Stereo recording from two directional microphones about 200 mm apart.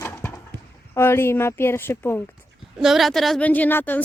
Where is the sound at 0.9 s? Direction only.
10° left (ahead or behind).